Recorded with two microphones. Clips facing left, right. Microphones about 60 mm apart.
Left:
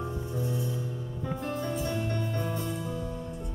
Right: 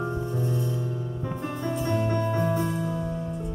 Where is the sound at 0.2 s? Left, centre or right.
Centre.